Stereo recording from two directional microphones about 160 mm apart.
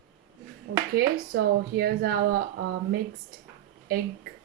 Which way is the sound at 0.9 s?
70° right (ahead or behind).